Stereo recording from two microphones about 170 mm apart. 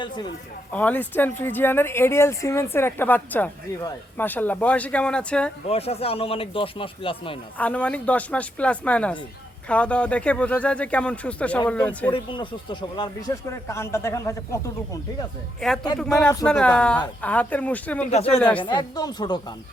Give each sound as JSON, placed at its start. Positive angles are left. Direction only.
{"t": 0.7, "sound": "speech", "side_deg": 10}
{"t": 5.6, "sound": "speech", "side_deg": 35}
{"t": 7.6, "sound": "speech", "side_deg": 10}
{"t": 12.1, "sound": "speech", "side_deg": 30}
{"t": 15.9, "sound": "speech", "side_deg": 25}
{"t": 16.5, "sound": "speech", "side_deg": 5}
{"t": 18.6, "sound": "speech", "side_deg": 25}